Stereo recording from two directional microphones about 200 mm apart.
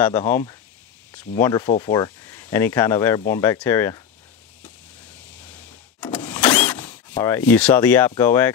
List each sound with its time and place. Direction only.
0.0 s speech: 10° left (ahead or behind)
2.2 s speech: 10° left (ahead or behind)
4.6 s vehicle: 5° left (ahead or behind)
6.3 s a sound: 10° left (ahead or behind)
8.2 s speech: 10° left (ahead or behind)